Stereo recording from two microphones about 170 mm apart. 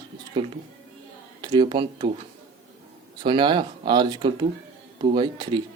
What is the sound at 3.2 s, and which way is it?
A man's voice, 25° right (ahead or behind).